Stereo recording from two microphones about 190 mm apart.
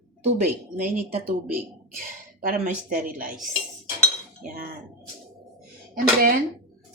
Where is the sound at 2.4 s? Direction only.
45° right (ahead or behind).